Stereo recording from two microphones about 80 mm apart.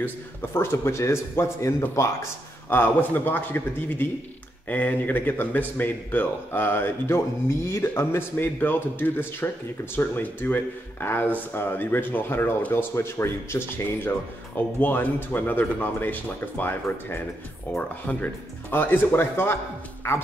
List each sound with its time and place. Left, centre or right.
0.0 s a man's voice: left
2.7 s speech: left